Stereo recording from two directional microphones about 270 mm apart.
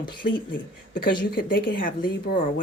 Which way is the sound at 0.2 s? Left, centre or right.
Left.